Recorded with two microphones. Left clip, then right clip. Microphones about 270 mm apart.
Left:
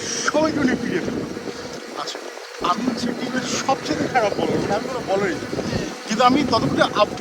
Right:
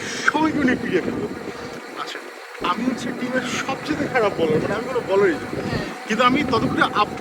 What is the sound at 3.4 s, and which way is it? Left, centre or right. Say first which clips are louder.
Speech: left 3 dB; centre.